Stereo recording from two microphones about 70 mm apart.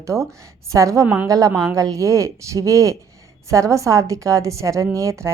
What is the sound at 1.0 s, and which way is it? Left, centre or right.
Speech, right.